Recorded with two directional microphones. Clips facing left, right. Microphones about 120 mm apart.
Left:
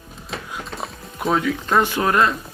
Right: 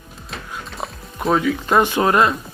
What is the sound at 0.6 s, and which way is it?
Music, centre (ahead or behind).